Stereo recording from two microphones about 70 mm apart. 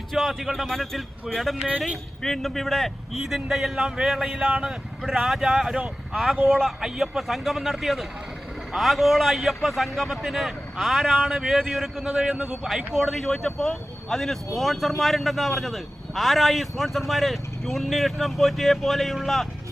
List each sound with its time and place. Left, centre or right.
0.1 s speech: centre
4.7 s speech: centre